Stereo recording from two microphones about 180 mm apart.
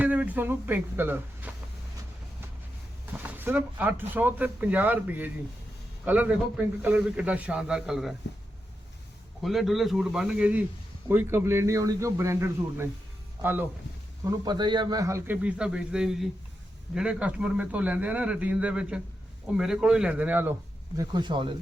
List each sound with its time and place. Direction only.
0.0 s speech: 10° right (ahead or behind)
3.1 s a man's voice: 10° right (ahead or behind)
9.4 s a man's voice: centre (ahead or behind)
14.3 s a man's voice: 25° right (ahead or behind)
20.9 s speech: 20° right (ahead or behind)